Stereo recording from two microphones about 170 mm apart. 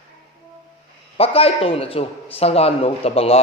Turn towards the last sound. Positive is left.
turn(degrees=35)  # may be behind; listen again after turning